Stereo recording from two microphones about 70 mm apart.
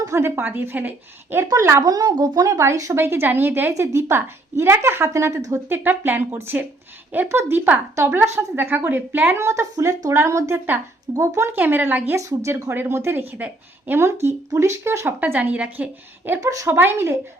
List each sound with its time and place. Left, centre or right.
0.2 s a woman's voice: right
1.8 s speech: right
2.5 s a woman's voice: right
3.0 s a woman's voice: right
5.6 s a woman's voice: right
9.4 s a woman's voice: right
10.1 s a woman's voice: right
11.5 s speech: right
12.1 s a woman's voice: right
15.2 s speech: right
15.5 s a woman's voice: centre
16.4 s a woman's voice: right
16.7 s a woman's voice: right